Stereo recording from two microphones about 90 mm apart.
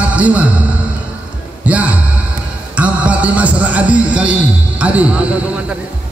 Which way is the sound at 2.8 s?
15° right (ahead or behind).